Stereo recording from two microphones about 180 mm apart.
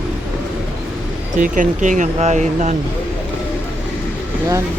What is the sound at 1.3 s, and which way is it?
Speech, 45° right (ahead or behind).